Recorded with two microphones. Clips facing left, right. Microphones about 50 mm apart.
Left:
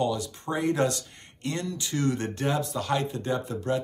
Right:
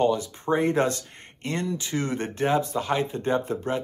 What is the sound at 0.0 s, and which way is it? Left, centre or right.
Speech, right.